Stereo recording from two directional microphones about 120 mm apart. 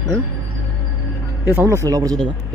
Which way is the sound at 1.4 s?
20° right (ahead or behind).